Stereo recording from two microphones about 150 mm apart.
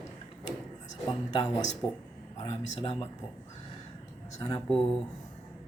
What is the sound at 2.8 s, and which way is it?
Speech, 40° left (ahead or behind).